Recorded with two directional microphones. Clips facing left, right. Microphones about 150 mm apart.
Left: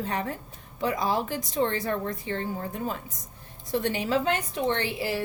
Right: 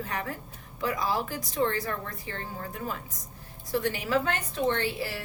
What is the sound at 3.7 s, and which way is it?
A woman's voice, 25° left (ahead or behind).